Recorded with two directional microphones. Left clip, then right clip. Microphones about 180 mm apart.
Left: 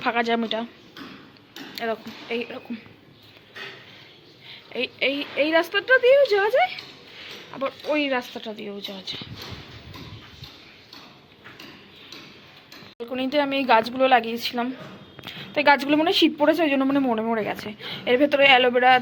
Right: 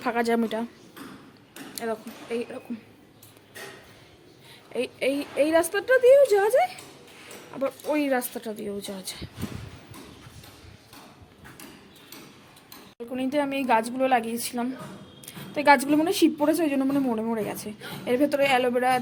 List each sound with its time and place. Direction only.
0.0 s speech: 20° right (ahead or behind)
1.7 s speech: centre (ahead or behind)
4.7 s a woman's voice: 10° right (ahead or behind)
7.9 s speech: 25° right (ahead or behind)
8.8 s speech: 45° right (ahead or behind)
13.0 s a woman's voice: 5° right (ahead or behind)